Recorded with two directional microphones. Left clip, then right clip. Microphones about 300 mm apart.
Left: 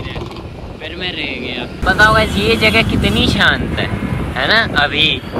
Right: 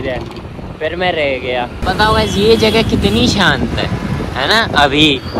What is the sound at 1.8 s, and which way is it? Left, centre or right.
Speech, centre.